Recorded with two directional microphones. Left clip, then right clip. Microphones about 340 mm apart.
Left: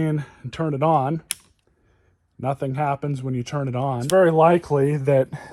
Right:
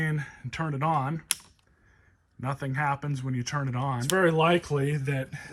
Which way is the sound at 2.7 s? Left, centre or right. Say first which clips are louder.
Left 5 dB; centre.